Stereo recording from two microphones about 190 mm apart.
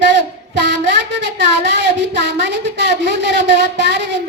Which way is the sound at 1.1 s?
70° right (ahead or behind).